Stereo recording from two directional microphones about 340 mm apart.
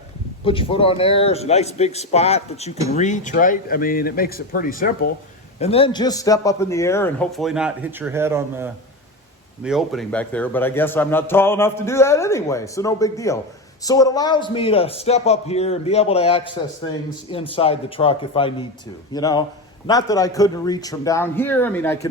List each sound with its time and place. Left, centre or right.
0.4 s a man's voice: centre
17.5 s a man's voice: centre